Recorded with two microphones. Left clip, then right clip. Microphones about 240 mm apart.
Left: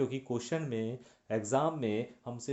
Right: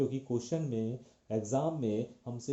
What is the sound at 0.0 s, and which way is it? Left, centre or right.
Speech, left.